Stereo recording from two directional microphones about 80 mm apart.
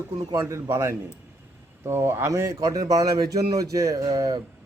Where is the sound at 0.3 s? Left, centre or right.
Right.